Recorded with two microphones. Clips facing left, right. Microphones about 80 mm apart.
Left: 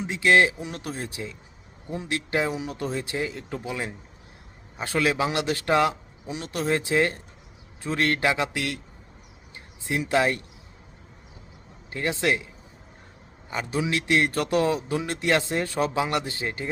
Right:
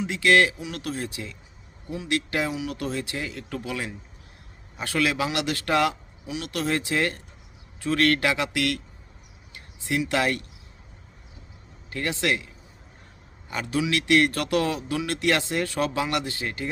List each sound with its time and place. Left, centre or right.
0.0 s a man's voice: left
10.1 s a man's voice: left
11.9 s a man's voice: left
13.5 s a man's voice: left